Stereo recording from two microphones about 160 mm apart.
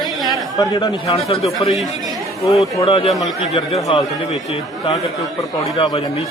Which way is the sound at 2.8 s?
35° left (ahead or behind).